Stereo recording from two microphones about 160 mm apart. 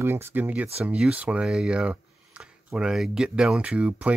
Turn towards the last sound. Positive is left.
turn(degrees=-10)  # may be behind; listen again after turning